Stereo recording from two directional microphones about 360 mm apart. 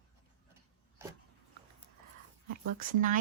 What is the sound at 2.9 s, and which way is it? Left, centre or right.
Speech, right.